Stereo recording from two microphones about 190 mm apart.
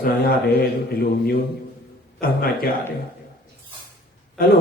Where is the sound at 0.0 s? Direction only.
55° left (ahead or behind).